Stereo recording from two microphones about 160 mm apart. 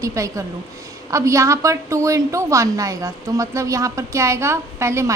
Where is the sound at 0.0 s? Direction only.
20° right (ahead or behind).